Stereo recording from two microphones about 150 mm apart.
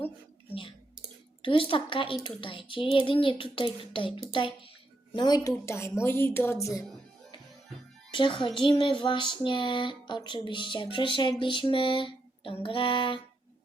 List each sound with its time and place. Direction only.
1.4 s music: 35° left (ahead or behind)
5.1 s a woman's voice: 25° left (ahead or behind)
8.1 s music: 35° left (ahead or behind)